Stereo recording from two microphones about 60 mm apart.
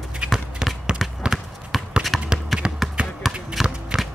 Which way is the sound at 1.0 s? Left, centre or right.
Centre.